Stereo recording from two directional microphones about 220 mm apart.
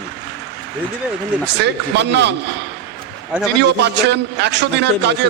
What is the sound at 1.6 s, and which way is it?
Speech, 50° right (ahead or behind).